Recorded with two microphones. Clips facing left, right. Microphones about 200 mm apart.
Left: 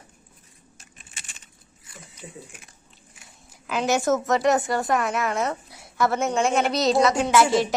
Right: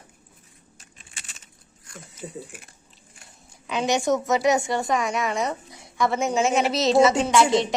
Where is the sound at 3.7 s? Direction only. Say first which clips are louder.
Even; 5° left (ahead or behind).